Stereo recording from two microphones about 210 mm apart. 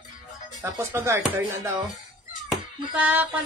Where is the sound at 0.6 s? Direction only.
10° right (ahead or behind).